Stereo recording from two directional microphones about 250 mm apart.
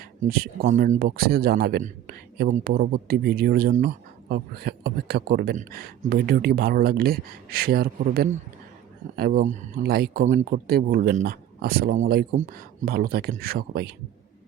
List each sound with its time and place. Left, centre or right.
0.0 s speech: right